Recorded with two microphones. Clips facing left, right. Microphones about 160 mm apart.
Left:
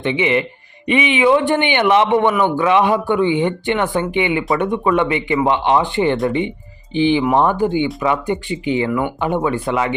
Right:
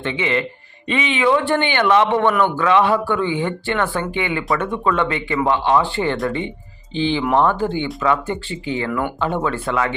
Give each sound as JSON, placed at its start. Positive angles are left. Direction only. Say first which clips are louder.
{"t": 0.0, "sound": "speech", "louder": "left 4 dB", "side_deg": 15}